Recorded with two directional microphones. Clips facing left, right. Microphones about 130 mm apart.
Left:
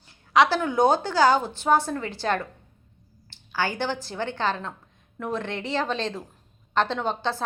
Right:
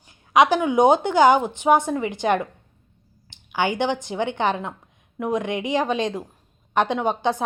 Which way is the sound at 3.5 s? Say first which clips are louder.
Right 5 dB; 20° right (ahead or behind).